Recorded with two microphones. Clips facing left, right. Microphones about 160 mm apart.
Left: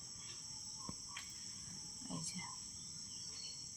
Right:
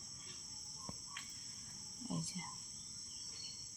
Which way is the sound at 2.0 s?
20° right (ahead or behind).